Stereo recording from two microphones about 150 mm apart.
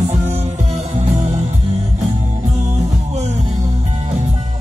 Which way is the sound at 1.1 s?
45° right (ahead or behind).